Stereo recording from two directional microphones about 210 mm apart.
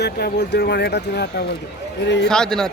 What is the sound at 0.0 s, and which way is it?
A man's voice, 55° left (ahead or behind).